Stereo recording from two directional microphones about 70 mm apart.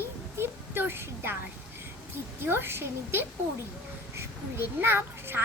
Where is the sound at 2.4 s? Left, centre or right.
Right.